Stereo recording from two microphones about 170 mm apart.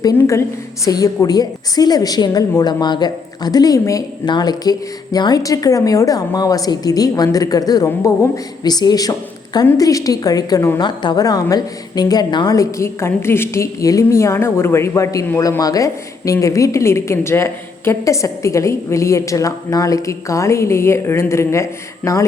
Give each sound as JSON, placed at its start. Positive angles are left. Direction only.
{"t": 0.2, "sound": "a woman's voice", "side_deg": 15}